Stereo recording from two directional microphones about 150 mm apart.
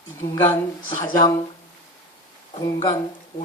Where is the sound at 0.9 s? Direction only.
25° left (ahead or behind).